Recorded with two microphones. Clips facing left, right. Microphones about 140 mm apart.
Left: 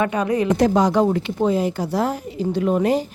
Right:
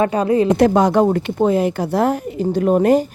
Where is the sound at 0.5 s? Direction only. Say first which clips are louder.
Right 1 dB; 60° right (ahead or behind).